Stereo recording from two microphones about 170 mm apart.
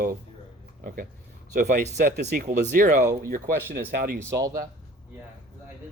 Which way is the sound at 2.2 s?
60° right (ahead or behind).